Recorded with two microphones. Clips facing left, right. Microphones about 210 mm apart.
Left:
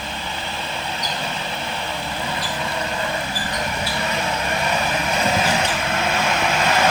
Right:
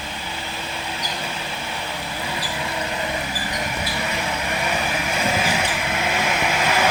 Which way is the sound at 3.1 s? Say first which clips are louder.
Left 1 dB; 15° right (ahead or behind).